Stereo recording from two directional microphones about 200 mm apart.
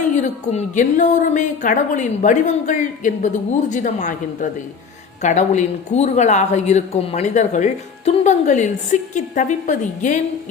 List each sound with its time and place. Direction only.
0.0 s speech: 35° left (ahead or behind)